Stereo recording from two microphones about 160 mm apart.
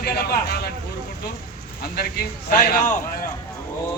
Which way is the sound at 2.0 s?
75° left (ahead or behind).